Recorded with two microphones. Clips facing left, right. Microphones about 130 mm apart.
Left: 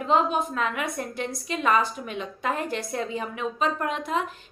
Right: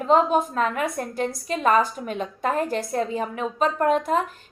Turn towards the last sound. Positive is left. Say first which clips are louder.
# right 7 dB
turn(degrees=-45)  # may be behind; listen again after turning